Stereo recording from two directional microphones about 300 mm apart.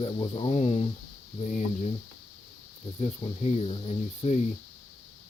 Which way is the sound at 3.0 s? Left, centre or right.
Centre.